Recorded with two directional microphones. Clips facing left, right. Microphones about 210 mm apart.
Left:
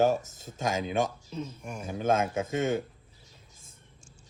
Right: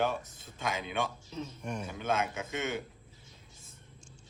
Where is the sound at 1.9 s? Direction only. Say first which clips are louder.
Left 7 dB; 45° left (ahead or behind).